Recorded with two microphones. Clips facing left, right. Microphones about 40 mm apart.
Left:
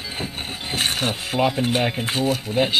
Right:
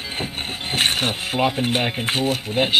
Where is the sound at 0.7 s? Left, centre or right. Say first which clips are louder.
Right 2 dB; right.